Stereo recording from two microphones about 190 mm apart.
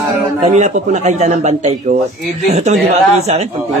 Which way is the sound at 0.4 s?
40° right (ahead or behind).